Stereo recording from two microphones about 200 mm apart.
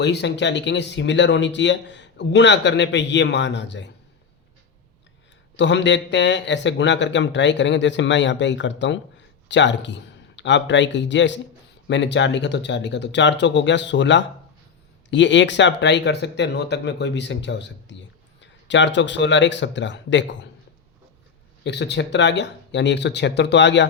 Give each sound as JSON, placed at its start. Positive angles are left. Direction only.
{"t": 0.0, "sound": "speech", "side_deg": 60}
{"t": 5.5, "sound": "a man's voice", "side_deg": 65}
{"t": 21.6, "sound": "speech", "side_deg": 60}